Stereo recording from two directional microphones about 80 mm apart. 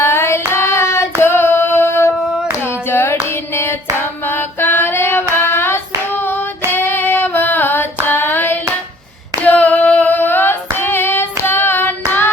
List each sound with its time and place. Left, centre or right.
0.0 s hands: left
1.2 s female singing: left
2.8 s hands: left
4.2 s female singing: left
5.4 s hands: left
6.7 s female singing: left
8.0 s hands: left
9.4 s singing: centre